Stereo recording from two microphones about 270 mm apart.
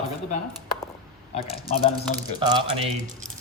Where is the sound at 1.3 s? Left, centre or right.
Left.